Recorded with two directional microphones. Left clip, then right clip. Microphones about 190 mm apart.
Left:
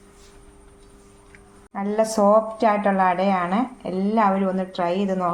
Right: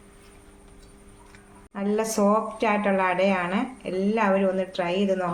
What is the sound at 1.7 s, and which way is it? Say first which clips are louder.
A woman's voice: left 4 dB; 50° left (ahead or behind).